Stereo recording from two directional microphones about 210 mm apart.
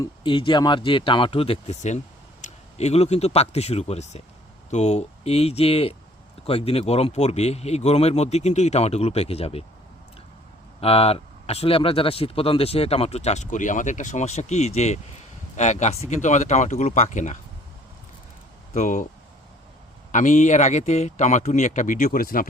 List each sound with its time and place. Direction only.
0.0 s speech: 20° left (ahead or behind)
10.8 s speech: 30° left (ahead or behind)
18.7 s speech: 35° left (ahead or behind)
20.1 s speech: 35° left (ahead or behind)